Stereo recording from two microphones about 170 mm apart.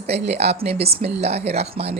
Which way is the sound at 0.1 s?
40° right (ahead or behind).